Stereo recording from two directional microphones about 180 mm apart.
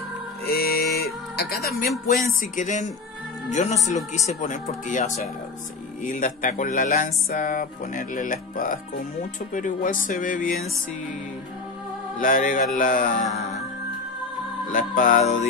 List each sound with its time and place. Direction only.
0.5 s music: 60° left (ahead or behind)
2.0 s speech: 45° left (ahead or behind)
12.2 s speech: 50° left (ahead or behind)
14.7 s speech: 50° left (ahead or behind)